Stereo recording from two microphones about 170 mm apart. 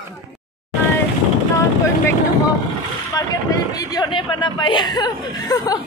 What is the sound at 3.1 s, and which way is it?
Speech, 20° left (ahead or behind).